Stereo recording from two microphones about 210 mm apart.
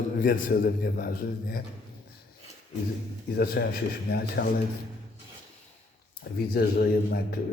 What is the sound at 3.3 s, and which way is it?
A man's voice, 50° left (ahead or behind).